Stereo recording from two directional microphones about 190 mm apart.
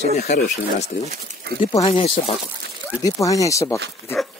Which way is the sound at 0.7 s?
35° left (ahead or behind).